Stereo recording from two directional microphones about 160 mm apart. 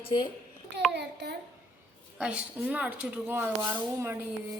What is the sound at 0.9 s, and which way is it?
Speech, 90° right.